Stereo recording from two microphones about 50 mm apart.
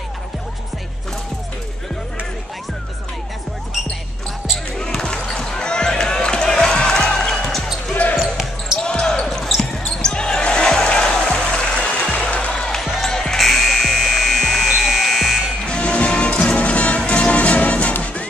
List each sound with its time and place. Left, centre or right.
4.7 s basketball bounce: centre
5.3 s music: centre
7.4 s basketball bounce: centre
7.9 s basketball bounce: left
8.2 s basketball bounce: centre
8.7 s basketball bounce: centre
9.2 s basketball bounce: centre
12.8 s music: centre
13.1 s music: centre
15.6 s music: left